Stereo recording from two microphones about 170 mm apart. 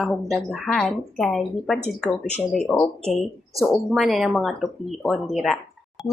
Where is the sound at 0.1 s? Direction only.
Centre (ahead or behind).